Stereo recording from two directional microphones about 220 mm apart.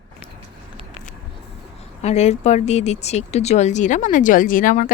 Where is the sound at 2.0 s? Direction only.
30° left (ahead or behind).